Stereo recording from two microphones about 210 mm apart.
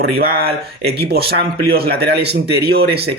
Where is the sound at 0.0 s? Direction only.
45° right (ahead or behind).